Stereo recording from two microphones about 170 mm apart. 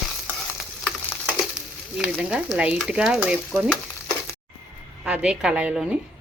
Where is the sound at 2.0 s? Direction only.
5° right (ahead or behind).